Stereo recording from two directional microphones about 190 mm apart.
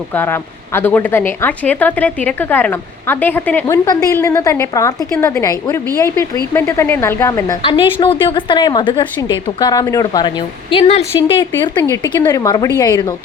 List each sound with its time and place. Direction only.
0.1 s a woman's voice: 10° left (ahead or behind)